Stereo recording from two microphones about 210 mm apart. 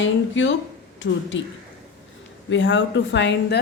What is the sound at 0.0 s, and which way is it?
A woman's voice, 60° left (ahead or behind).